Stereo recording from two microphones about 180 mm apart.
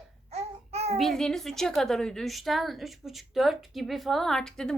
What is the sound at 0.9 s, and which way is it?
A woman's voice, centre (ahead or behind).